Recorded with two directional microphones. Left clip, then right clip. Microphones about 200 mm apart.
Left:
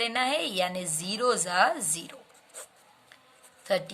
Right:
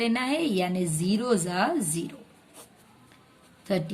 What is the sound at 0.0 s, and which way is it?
A woman's voice, 25° left (ahead or behind).